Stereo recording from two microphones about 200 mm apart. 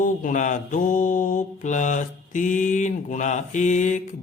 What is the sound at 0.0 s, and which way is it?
Mantra, 40° left (ahead or behind).